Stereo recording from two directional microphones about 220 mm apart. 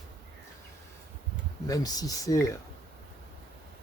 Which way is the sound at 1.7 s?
15° left (ahead or behind).